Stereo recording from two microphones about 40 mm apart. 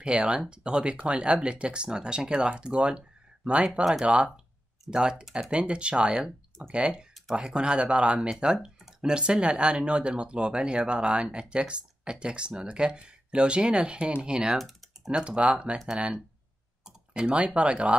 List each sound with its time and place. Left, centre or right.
0.0 s speech: right